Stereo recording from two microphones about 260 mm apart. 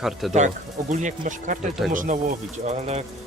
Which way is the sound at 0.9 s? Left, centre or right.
Right.